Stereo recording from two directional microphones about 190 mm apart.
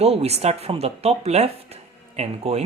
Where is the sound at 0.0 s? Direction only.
35° right (ahead or behind).